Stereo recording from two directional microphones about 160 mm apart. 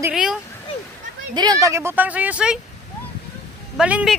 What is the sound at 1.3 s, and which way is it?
Speech, 25° right (ahead or behind).